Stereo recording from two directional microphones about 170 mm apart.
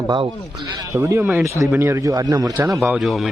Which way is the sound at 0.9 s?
10° right (ahead or behind).